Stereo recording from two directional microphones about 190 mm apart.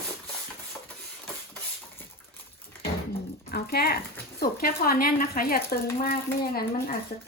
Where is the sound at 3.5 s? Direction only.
55° left (ahead or behind).